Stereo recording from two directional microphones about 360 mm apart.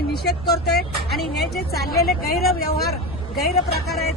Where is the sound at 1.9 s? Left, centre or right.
Left.